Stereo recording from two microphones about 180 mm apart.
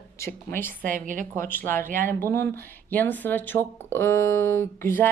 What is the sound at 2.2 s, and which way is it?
Speech, 15° left (ahead or behind).